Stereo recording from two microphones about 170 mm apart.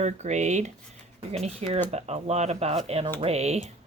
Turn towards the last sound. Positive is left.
turn(degrees=-40)  # may be behind; listen again after turning